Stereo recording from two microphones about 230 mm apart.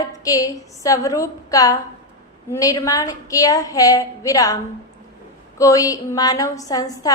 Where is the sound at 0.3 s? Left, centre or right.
Centre.